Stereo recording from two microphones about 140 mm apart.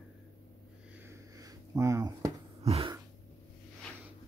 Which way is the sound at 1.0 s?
25° right (ahead or behind).